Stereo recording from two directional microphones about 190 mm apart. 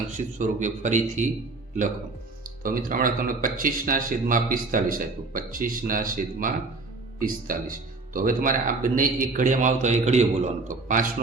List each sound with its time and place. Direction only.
0.1 s speech: 40° right (ahead or behind)
2.6 s speech: 45° right (ahead or behind)